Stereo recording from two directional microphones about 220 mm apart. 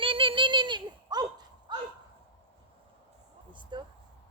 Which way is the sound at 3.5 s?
20° right (ahead or behind).